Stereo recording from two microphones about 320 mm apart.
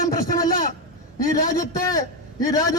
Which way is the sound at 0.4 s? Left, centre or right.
Left.